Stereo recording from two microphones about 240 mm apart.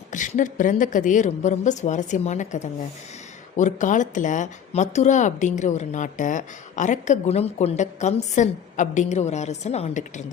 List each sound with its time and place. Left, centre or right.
0.1 s speech: left